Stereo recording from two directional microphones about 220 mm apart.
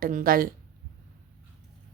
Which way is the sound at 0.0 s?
40° right (ahead or behind).